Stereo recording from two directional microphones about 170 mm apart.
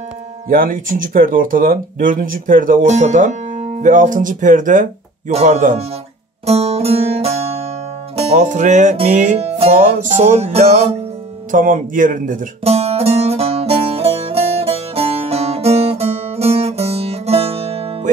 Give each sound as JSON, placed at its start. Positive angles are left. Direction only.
{"t": 0.5, "sound": "speech", "side_deg": -55}
{"t": 6.4, "sound": "music", "side_deg": -35}
{"t": 8.2, "sound": "speech", "side_deg": -45}
{"t": 11.5, "sound": "speech", "side_deg": -50}
{"t": 12.6, "sound": "music", "side_deg": -40}